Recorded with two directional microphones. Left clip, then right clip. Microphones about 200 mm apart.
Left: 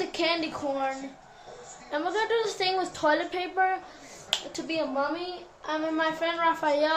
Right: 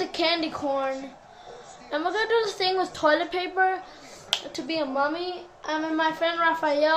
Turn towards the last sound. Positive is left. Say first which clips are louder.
# right 2 dB
turn(degrees=-5)  # may be behind; listen again after turning